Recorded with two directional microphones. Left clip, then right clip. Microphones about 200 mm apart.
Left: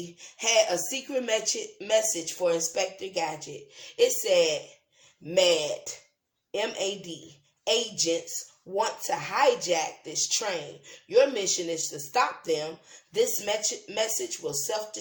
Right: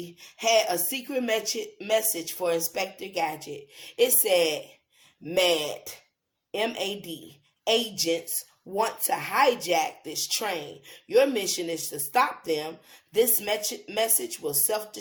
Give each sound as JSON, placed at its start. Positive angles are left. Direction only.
{"t": 0.0, "sound": "speech", "side_deg": -30}